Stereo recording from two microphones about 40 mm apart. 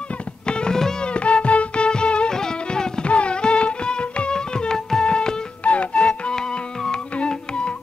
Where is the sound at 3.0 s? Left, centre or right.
Left.